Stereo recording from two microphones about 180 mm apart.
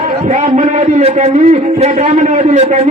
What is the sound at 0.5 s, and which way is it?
A man's voice, 40° right (ahead or behind).